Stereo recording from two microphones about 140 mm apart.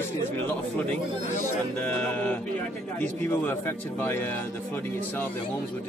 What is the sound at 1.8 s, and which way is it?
A man's voice, 10° left (ahead or behind).